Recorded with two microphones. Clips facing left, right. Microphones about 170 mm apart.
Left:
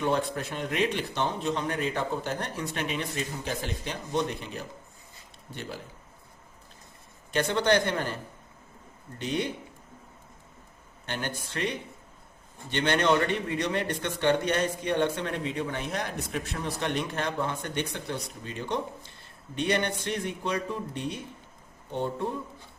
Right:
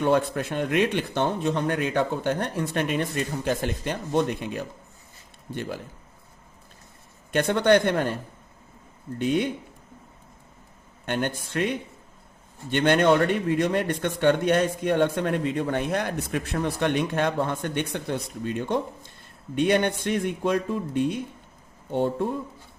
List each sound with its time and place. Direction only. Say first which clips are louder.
0.0 s a man's voice: right 5 dB; 60° right (ahead or behind)
7.3 s speech: right 5 dB; 55° right (ahead or behind)
9.1 s a man's voice: right 6 dB; 55° right (ahead or behind)
11.0 s a man's voice: right 7 dB; 55° right (ahead or behind)